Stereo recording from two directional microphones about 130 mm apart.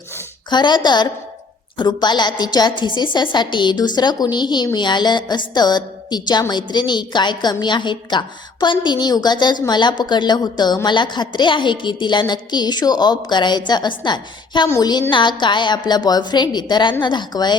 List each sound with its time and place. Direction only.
0.5 s a woman's voice: 35° left (ahead or behind)